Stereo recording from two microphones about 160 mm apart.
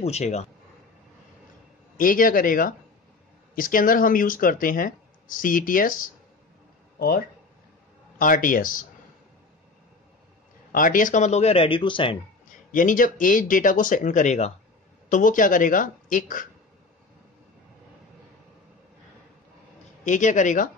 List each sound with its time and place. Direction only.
0.0 s speech: 45° left (ahead or behind)
2.0 s speech: 60° left (ahead or behind)
7.0 s speech: 70° left (ahead or behind)
8.2 s speech: 60° left (ahead or behind)
10.7 s speech: 60° left (ahead or behind); by 12.2 s 30° left (ahead or behind)
12.7 s speech: 55° left (ahead or behind)
20.1 s speech: 50° left (ahead or behind)